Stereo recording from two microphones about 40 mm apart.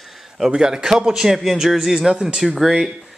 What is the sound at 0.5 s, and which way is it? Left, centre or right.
A man's voice, centre.